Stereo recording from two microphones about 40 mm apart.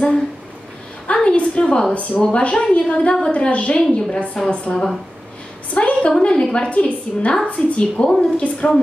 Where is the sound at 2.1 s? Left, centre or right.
Left.